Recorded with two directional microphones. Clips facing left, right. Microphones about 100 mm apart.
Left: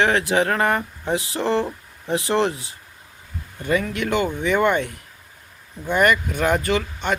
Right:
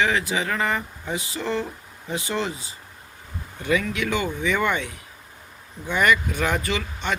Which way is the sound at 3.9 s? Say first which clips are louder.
Left 3 dB; 55° left (ahead or behind).